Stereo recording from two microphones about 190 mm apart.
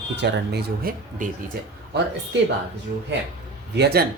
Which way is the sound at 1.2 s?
40° right (ahead or behind).